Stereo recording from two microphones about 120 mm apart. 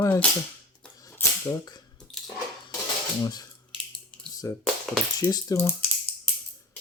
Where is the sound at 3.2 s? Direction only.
30° left (ahead or behind).